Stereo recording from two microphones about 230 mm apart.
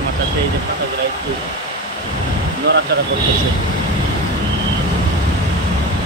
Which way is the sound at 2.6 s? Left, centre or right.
Right.